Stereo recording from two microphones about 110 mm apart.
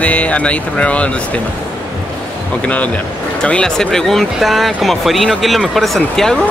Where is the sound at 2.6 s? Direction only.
10° left (ahead or behind).